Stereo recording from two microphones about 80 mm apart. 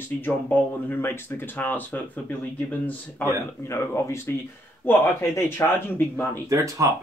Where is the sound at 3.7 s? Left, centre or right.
Left.